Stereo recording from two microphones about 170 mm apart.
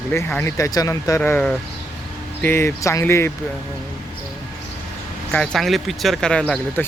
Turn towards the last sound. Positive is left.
turn(degrees=5)  # may be behind; listen again after turning